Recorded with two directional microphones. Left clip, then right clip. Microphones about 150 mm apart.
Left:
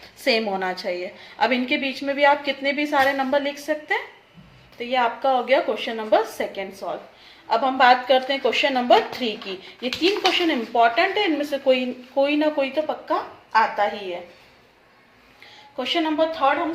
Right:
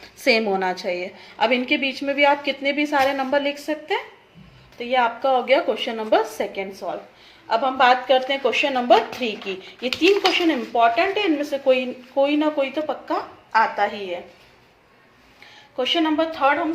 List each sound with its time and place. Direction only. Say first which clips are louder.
0.3 s a woman's voice: right 3 dB; 30° right (ahead or behind)
15.7 s a woman's voice: right 3 dB; 25° right (ahead or behind)